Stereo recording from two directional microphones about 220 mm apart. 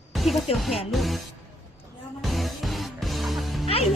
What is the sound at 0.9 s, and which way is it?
Speech, centre (ahead or behind).